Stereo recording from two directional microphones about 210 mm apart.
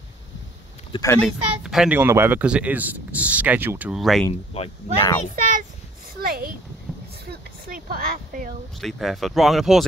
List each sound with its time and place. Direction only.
0.9 s speech: 10° left (ahead or behind)
1.6 s speech: 5° right (ahead or behind)
4.5 s speech: 30° left (ahead or behind)
4.9 s speech: 15° left (ahead or behind)
5.3 s a child's voice: 40° right (ahead or behind)
8.8 s speech: centre (ahead or behind)